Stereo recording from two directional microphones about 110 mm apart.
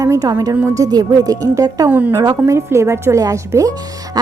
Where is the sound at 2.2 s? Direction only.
30° right (ahead or behind).